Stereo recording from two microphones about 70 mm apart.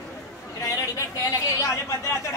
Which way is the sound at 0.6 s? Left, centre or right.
Left.